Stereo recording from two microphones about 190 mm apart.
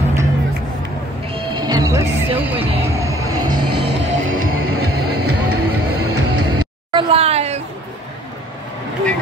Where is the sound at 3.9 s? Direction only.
80° right.